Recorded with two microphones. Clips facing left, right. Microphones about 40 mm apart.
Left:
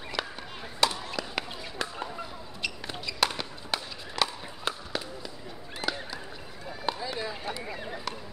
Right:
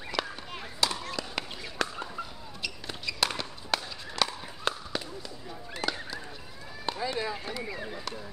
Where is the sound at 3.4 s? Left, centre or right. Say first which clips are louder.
Right 1 dB; centre.